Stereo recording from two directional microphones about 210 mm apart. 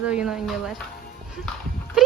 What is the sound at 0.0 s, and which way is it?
Speech, 5° right (ahead or behind).